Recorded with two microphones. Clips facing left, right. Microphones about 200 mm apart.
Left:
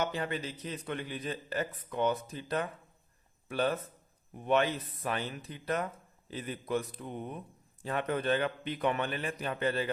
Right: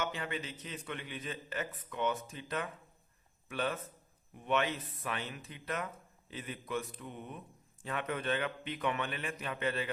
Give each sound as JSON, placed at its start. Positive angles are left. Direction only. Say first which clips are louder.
{"t": 0.0, "sound": "a man's voice", "louder": "left 4 dB", "side_deg": 40}